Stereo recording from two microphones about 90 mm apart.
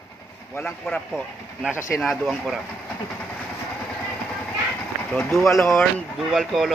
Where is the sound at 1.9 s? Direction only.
15° left (ahead or behind).